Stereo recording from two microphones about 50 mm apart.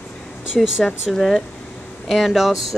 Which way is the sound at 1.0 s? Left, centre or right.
Centre.